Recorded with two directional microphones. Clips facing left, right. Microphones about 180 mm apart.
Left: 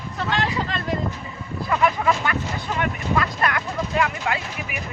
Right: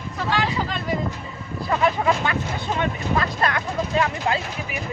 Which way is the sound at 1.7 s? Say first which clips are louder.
Even; 25° right (ahead or behind).